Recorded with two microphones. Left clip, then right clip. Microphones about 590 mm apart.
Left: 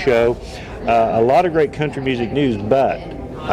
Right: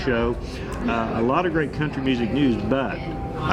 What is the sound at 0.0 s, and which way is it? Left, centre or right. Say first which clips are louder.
Speech: left 8 dB; left.